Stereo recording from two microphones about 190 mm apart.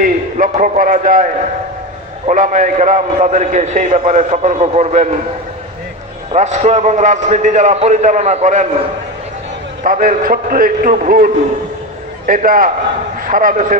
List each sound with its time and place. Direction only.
0.0 s a man's voice: 45° right (ahead or behind)
6.3 s a man's voice: 40° right (ahead or behind)
9.8 s a man's voice: 45° right (ahead or behind)